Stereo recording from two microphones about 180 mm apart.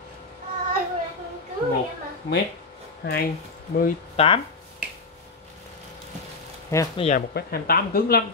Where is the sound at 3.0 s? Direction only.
55° left (ahead or behind).